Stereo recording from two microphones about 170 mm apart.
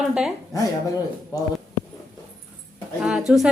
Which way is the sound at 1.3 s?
20° left (ahead or behind).